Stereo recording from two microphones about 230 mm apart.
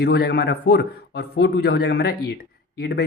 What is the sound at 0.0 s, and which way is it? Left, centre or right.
Speech, left.